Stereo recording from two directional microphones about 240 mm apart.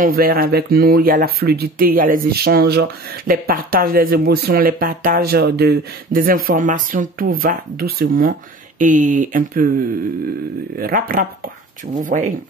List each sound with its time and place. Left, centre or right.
0.0 s speech: right
10.8 s speech: right